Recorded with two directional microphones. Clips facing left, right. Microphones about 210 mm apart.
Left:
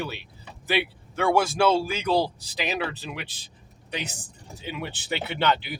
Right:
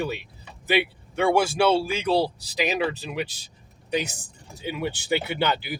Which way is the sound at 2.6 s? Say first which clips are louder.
Right 4 dB; 10° right (ahead or behind).